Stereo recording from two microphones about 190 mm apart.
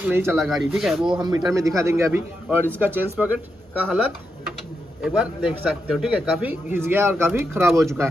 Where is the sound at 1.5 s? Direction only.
15° right (ahead or behind).